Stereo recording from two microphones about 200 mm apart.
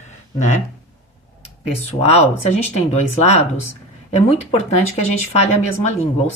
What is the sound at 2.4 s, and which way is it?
Speech, 35° left (ahead or behind).